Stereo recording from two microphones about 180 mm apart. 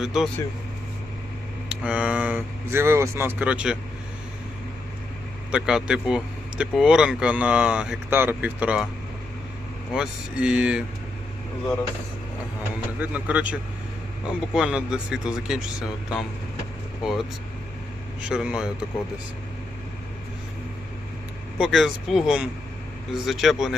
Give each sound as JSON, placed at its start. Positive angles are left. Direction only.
{"t": 0.0, "sound": "speech", "side_deg": -5}
{"t": 1.7, "sound": "speech", "side_deg": -5}
{"t": 5.5, "sound": "speech", "side_deg": -5}
{"t": 9.9, "sound": "speech", "side_deg": -5}
{"t": 13.0, "sound": "speech", "side_deg": -10}
{"t": 18.3, "sound": "speech", "side_deg": -5}
{"t": 21.6, "sound": "speech", "side_deg": 0}